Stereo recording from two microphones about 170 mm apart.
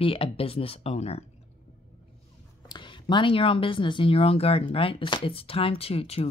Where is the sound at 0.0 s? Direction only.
35° left (ahead or behind).